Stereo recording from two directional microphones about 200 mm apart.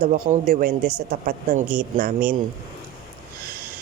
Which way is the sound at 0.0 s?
45° right (ahead or behind).